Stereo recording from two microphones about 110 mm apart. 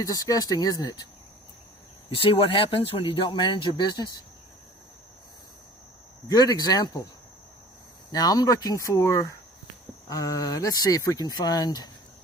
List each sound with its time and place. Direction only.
0.0 s speech: 35° left (ahead or behind)
2.0 s speech: 55° left (ahead or behind)
6.2 s speech: 35° left (ahead or behind)
8.1 s speech: 35° left (ahead or behind)